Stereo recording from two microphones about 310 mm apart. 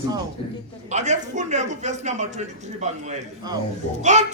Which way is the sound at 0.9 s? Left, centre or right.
Right.